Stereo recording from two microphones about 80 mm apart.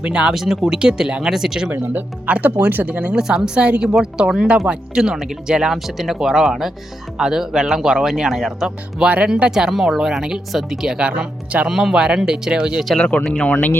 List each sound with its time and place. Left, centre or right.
0.0 s speech: centre
1.7 s speech: right; by 9.0 s centre
9.0 s speech: centre
13.0 s speech: centre
13.5 s speech: left